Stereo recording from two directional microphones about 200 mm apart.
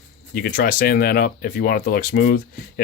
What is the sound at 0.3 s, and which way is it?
Speech, 50° left (ahead or behind).